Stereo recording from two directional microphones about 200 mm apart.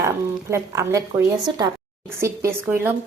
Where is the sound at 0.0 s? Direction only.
15° right (ahead or behind).